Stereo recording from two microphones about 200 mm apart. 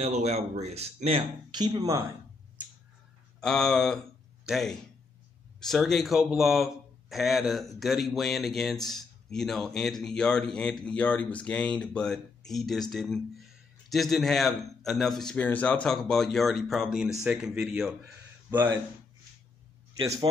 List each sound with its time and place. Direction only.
0.0 s speech: 35° right (ahead or behind); by 2.1 s 15° right (ahead or behind)
3.3 s speech: centre (ahead or behind)
18.0 s a sound: 10° right (ahead or behind)